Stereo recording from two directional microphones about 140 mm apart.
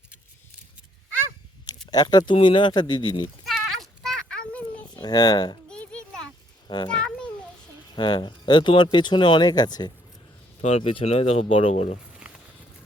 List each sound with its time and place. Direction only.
1.9 s speech: 30° left (ahead or behind)
3.4 s children playing: centre (ahead or behind)
5.0 s speech: 30° left (ahead or behind)
5.6 s a sound: 5° left (ahead or behind)
6.8 s a child's voice: 5° left (ahead or behind)
7.9 s speech: 35° left (ahead or behind)
10.6 s speech: 50° left (ahead or behind)